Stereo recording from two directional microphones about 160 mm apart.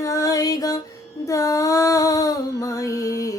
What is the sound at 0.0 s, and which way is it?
Music, 20° left (ahead or behind).